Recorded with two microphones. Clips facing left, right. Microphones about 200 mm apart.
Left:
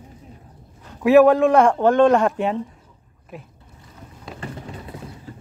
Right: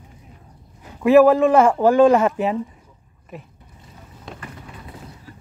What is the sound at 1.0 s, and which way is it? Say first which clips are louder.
Speech: even; centre (ahead or behind).